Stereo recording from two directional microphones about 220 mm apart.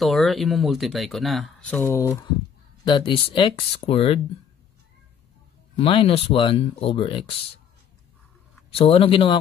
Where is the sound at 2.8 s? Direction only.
20° left (ahead or behind).